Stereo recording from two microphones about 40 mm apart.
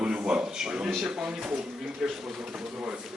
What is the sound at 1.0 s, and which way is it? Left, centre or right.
A man's voice, centre.